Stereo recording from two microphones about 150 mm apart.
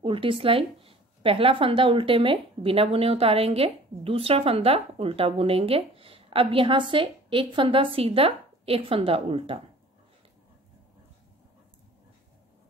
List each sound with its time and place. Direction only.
0.0 s a woman's voice: 35° right (ahead or behind)